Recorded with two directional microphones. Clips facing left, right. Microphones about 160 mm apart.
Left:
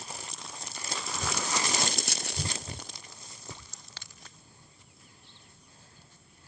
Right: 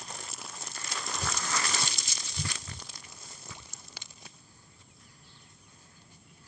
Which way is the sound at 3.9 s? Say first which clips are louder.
Right 1 dB; 10° right (ahead or behind).